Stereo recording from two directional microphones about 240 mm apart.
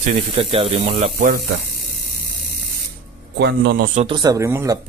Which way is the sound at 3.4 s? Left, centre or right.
Right.